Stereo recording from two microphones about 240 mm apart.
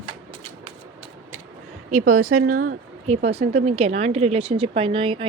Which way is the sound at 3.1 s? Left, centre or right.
Right.